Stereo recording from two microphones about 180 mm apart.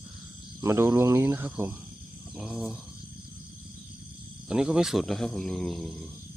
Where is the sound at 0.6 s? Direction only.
15° right (ahead or behind).